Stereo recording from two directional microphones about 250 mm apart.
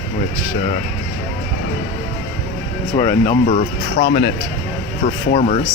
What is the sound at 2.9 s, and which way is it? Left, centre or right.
Speech, centre.